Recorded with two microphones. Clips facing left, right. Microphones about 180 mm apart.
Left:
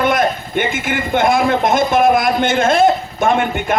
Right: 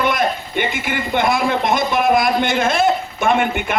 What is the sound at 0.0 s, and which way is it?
A man's voice, 50° left (ahead or behind).